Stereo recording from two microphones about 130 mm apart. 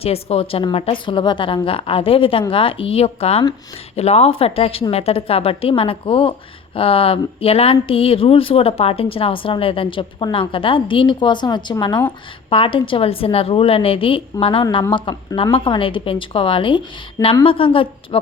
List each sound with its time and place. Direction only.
0.0 s speech: 50° left (ahead or behind)